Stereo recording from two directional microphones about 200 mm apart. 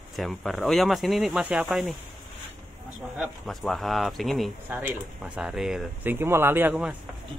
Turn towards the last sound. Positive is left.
turn(degrees=-5)  # may be behind; listen again after turning